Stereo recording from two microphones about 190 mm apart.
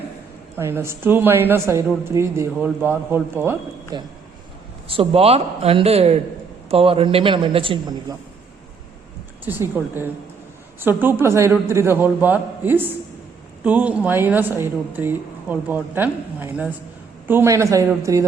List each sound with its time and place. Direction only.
0.5 s a woman's voice: 10° right (ahead or behind)
3.9 s a man's voice: 20° right (ahead or behind)
9.4 s a woman's voice: 10° right (ahead or behind)